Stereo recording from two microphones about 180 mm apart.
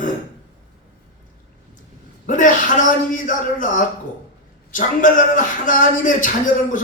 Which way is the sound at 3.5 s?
45° left (ahead or behind).